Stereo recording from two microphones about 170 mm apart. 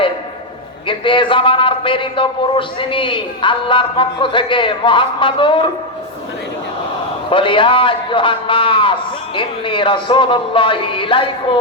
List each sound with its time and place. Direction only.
0.9 s a man's voice: 30° left (ahead or behind)
7.3 s a man's voice: 30° left (ahead or behind)